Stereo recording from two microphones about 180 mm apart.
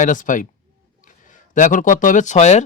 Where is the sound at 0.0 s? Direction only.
45° left (ahead or behind).